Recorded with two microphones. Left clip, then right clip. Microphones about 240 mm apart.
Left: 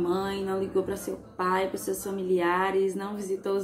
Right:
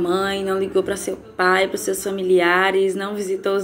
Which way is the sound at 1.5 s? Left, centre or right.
Centre.